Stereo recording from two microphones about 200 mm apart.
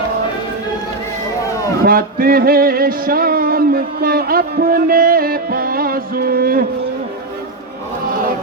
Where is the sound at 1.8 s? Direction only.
45° right (ahead or behind).